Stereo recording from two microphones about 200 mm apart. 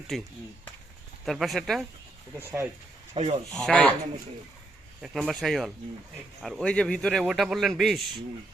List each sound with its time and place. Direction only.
0.1 s a man's voice: centre (ahead or behind)
2.4 s speech: 15° right (ahead or behind)
3.2 s speech: 25° right (ahead or behind)
3.5 s a man's voice: 5° left (ahead or behind)
5.0 s a man's voice: centre (ahead or behind)